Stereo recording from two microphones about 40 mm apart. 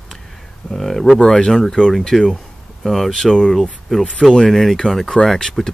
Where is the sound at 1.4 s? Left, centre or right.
Centre.